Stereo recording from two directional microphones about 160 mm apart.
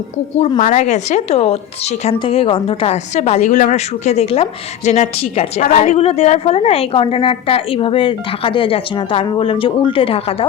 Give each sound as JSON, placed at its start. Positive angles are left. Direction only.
{"t": 0.6, "sound": "a woman's voice", "side_deg": 50}